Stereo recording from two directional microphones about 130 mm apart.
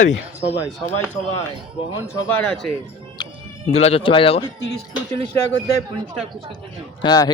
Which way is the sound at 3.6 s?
55° left (ahead or behind).